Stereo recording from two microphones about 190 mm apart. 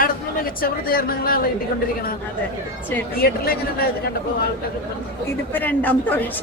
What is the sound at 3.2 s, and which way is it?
Speech, 50° left (ahead or behind).